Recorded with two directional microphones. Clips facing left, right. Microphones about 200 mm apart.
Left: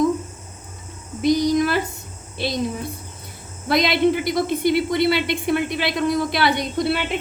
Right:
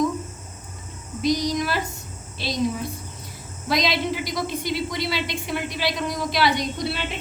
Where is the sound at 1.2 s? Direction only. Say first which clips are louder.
Left 5 dB; 55° left (ahead or behind).